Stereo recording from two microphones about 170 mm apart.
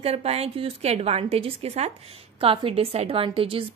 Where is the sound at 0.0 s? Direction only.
35° right (ahead or behind).